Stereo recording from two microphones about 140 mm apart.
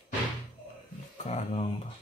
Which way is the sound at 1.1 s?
55° left (ahead or behind).